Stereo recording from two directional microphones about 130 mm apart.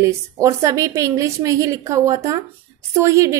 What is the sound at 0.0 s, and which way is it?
A woman's voice, 25° right (ahead or behind).